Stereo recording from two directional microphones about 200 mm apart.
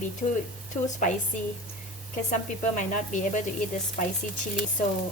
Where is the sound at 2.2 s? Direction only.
40° left (ahead or behind).